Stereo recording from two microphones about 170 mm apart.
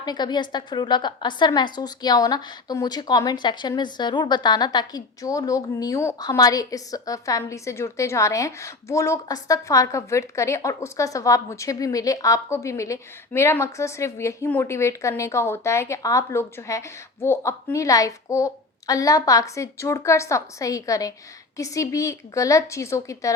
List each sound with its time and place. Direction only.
0.0 s a woman's voice: 25° left (ahead or behind)